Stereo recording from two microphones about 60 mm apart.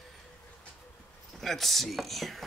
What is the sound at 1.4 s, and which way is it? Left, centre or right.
Speech, centre.